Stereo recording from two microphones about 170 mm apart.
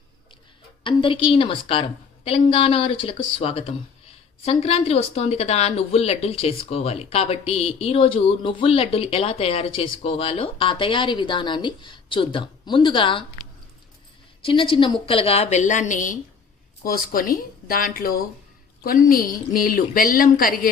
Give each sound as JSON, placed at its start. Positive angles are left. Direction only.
{"t": 0.9, "sound": "speech", "side_deg": 30}
{"t": 14.4, "sound": "a woman's voice", "side_deg": 30}